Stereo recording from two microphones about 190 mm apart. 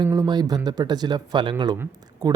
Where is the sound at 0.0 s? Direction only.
20° right (ahead or behind).